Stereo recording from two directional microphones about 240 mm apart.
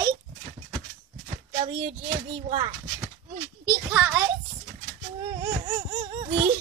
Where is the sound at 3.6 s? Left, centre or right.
Centre.